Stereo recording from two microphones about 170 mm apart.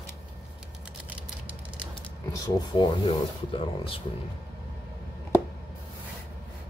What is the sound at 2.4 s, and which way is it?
Speech, 20° left (ahead or behind).